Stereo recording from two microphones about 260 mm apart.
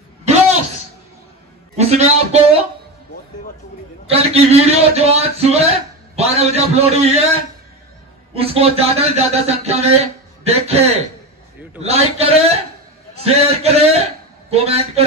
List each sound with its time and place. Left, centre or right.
0.2 s a sound: right
1.8 s a man's voice: right
4.1 s a man's voice: right
8.4 s a man's voice: right